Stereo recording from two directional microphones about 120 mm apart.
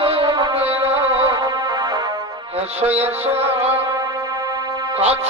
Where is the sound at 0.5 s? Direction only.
60° right (ahead or behind).